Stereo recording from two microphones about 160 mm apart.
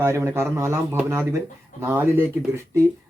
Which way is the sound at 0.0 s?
15° right (ahead or behind).